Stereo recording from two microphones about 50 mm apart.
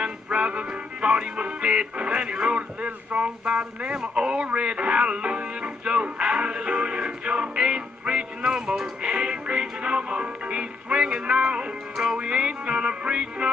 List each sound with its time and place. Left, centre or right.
0.0 s music: right
4.0 s speech: centre